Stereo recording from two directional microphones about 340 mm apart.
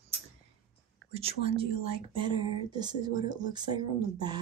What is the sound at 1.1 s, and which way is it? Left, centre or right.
Speech, centre.